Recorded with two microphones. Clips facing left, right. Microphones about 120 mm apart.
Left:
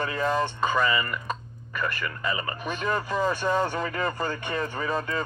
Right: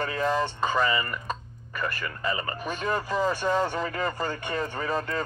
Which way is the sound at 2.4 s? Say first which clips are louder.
Even; 20° left (ahead or behind).